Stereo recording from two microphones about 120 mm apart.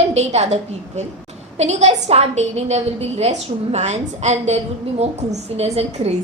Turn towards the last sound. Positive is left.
turn(degrees=-65)  # may be behind; listen again after turning